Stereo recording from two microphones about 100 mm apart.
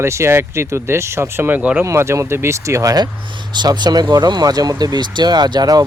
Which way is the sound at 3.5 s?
45° right (ahead or behind).